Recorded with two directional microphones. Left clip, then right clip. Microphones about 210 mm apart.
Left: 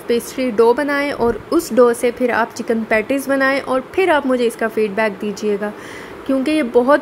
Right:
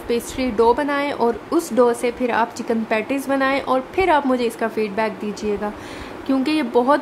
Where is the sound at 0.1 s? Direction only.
15° left (ahead or behind).